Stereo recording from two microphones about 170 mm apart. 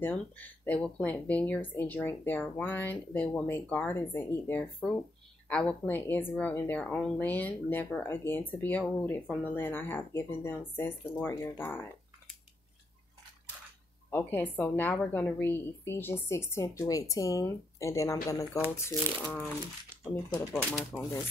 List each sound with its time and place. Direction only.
0.0 s speech: 10° left (ahead or behind)
14.1 s speech: 10° left (ahead or behind)
20.9 s speech: 5° right (ahead or behind)